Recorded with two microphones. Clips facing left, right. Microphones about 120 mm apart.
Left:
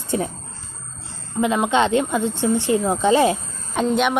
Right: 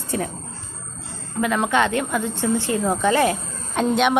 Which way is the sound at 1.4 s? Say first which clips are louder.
Left 2 dB; 20° left (ahead or behind).